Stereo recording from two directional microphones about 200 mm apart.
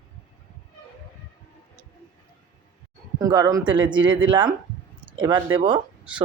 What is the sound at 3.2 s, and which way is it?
Speech, 15° right (ahead or behind).